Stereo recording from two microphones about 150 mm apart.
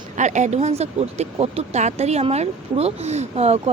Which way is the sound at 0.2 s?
50° right (ahead or behind).